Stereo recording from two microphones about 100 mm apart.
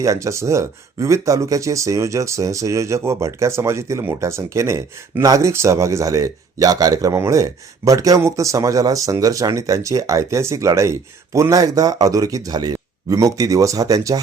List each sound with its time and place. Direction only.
0.0 s speech: 30° right (ahead or behind)